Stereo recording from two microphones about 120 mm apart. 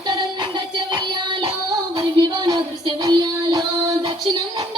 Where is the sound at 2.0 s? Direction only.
40° right (ahead or behind).